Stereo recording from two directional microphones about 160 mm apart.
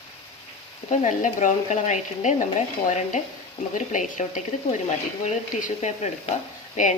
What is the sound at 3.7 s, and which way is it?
Speech, 50° left (ahead or behind).